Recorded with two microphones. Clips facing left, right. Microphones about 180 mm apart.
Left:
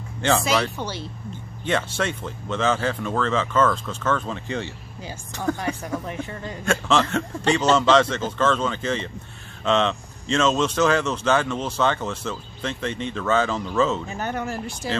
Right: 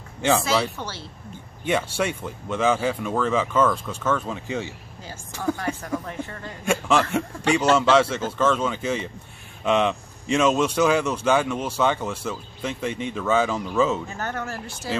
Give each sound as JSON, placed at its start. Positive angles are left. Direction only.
{"t": 0.2, "sound": "speech", "side_deg": -10}
{"t": 0.7, "sound": "speech", "side_deg": 15}
{"t": 1.6, "sound": "speech", "side_deg": -10}
{"t": 5.6, "sound": "speech", "side_deg": 15}
{"t": 6.6, "sound": "speech", "side_deg": -10}
{"t": 14.0, "sound": "speech", "side_deg": 15}